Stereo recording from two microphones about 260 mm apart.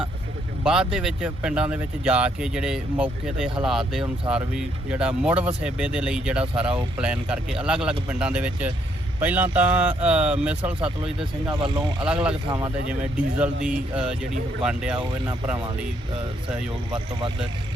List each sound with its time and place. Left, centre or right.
0.6 s speech: centre
12.0 s speech: centre
12.5 s speech: centre
13.4 s speech: centre
16.9 s speech: centre